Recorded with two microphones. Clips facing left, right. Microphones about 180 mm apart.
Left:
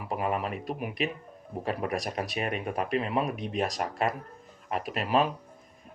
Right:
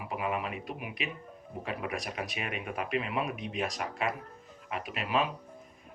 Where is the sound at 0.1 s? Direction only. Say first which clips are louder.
Left 4 dB; 40° left (ahead or behind).